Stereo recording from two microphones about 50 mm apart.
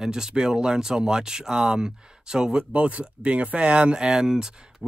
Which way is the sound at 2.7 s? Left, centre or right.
Right.